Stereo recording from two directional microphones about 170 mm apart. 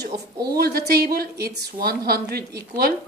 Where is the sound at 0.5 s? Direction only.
65° right (ahead or behind).